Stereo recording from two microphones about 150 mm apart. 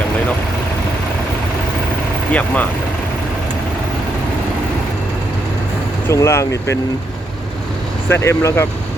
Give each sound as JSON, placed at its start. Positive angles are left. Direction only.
{"t": 2.3, "sound": "speech", "side_deg": 10}
{"t": 6.1, "sound": "speech", "side_deg": 20}
{"t": 8.1, "sound": "speech", "side_deg": 20}